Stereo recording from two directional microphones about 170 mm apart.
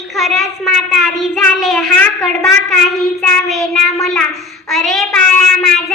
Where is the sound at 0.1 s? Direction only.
Centre (ahead or behind).